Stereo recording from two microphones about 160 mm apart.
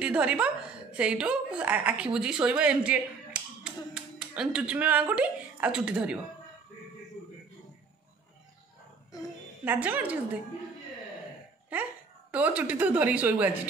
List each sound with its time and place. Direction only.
0.0 s a woman's voice: 10° right (ahead or behind)
9.7 s a woman's voice: 10° right (ahead or behind)
11.7 s a woman's voice: 10° right (ahead or behind)